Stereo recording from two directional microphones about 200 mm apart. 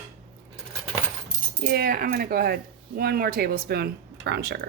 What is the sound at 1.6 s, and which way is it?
Speech, 50° right (ahead or behind).